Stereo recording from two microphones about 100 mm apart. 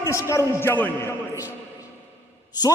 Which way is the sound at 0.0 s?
30° left (ahead or behind).